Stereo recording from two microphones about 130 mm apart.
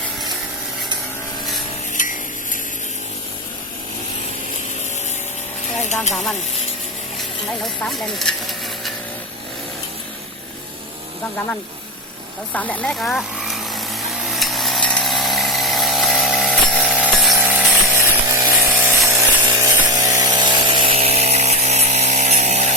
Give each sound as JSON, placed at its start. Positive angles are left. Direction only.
{"t": 2.0, "sound": "stir", "side_deg": 90}
{"t": 7.6, "sound": "speech", "side_deg": 0}
{"t": 12.5, "sound": "a sound", "side_deg": 10}